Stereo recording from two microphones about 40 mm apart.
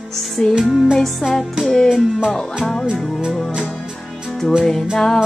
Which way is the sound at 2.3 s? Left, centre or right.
Centre.